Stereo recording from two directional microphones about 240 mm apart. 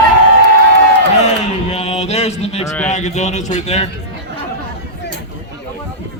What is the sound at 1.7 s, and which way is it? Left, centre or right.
Mantra, left.